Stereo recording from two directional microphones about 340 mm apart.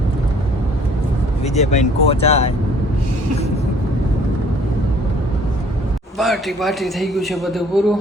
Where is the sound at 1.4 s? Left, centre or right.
Centre.